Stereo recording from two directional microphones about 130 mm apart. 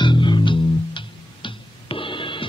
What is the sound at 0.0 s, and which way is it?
Music, 35° left (ahead or behind).